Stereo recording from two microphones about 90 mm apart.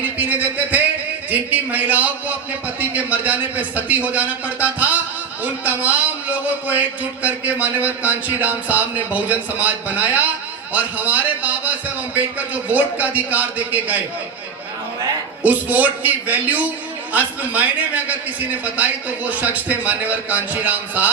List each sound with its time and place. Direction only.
0.2 s a sound: 20° right (ahead or behind)
1.3 s a man's voice: 20° right (ahead or behind)
12.7 s a man's voice: 15° right (ahead or behind)
15.4 s a man's voice: 15° right (ahead or behind)